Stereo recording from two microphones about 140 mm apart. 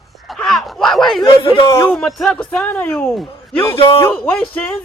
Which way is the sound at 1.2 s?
30° left (ahead or behind).